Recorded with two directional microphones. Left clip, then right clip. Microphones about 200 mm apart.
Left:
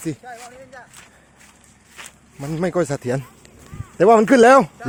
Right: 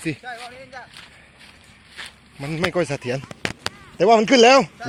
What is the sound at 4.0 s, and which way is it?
Speech, 45° left (ahead or behind).